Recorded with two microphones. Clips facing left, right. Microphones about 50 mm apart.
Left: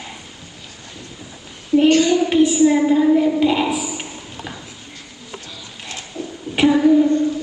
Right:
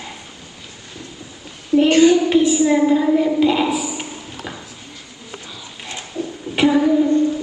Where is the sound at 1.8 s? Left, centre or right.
Centre.